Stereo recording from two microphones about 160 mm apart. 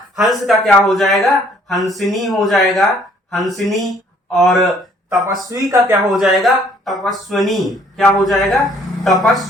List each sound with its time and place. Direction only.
0.2 s speech: centre (ahead or behind)
5.0 s speech: 20° right (ahead or behind)
6.1 s speech: centre (ahead or behind)